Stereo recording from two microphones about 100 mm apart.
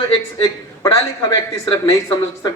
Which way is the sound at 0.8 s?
35° left (ahead or behind).